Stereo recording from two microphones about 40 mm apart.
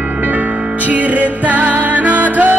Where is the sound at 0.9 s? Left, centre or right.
Right.